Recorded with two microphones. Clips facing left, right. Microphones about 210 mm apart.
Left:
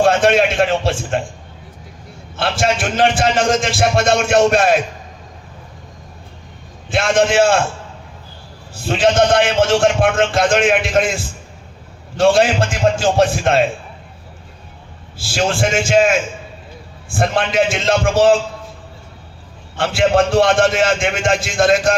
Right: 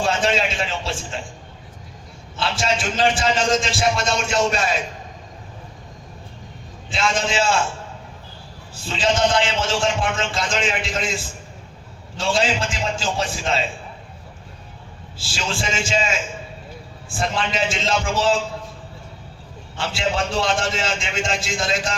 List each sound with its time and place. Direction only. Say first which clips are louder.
0.0 s a man's voice: left 8 dB; 60° left (ahead or behind)
2.3 s a man's voice: left 5 dB; 55° left (ahead or behind)
6.9 s a man's voice: left 8 dB; 55° left (ahead or behind)
8.8 s a man's voice: left 6 dB; 55° left (ahead or behind)
15.4 s a man's voice: left 9 dB; 60° left (ahead or behind)
19.7 s a man's voice: left 10 dB; 55° left (ahead or behind)